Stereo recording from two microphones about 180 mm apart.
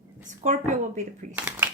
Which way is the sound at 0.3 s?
40° right (ahead or behind).